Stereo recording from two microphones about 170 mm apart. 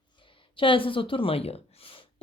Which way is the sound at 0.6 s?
30° left (ahead or behind).